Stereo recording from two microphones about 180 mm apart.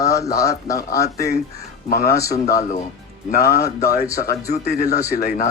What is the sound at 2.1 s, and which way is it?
Speech, 20° left (ahead or behind).